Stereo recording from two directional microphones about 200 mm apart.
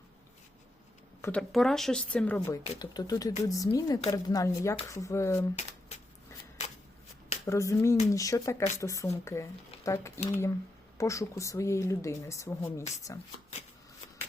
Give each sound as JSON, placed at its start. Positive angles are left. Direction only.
{"t": 1.2, "sound": "speech", "side_deg": 5}
{"t": 2.7, "sound": "a woman's voice", "side_deg": 20}
{"t": 7.4, "sound": "a woman's voice", "side_deg": 15}